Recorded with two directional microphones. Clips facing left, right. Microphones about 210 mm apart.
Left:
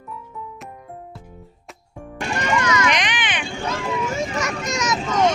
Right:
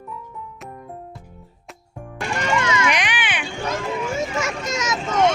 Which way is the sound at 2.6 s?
25° right (ahead or behind).